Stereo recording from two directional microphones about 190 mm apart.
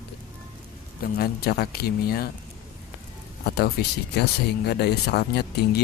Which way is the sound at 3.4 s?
55° left (ahead or behind).